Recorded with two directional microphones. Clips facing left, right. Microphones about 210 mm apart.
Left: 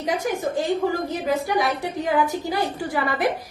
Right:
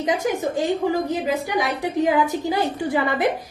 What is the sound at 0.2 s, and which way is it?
A woman's voice, 20° right (ahead or behind).